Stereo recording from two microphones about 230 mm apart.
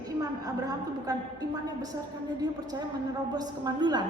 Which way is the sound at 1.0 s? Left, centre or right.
Centre.